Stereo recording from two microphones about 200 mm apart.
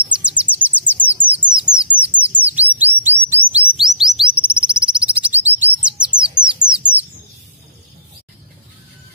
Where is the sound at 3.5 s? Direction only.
Centre (ahead or behind).